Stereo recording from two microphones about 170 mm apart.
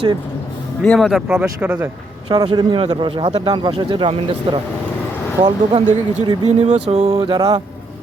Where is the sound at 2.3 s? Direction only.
25° right (ahead or behind).